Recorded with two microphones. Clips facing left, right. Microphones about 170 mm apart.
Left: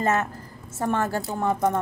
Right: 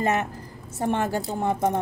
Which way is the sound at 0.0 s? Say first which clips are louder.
Even; 15° right (ahead or behind).